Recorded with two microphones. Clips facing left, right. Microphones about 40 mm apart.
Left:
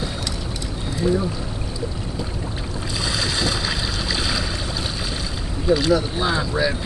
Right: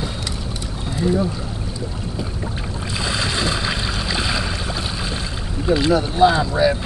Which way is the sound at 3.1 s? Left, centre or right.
Right.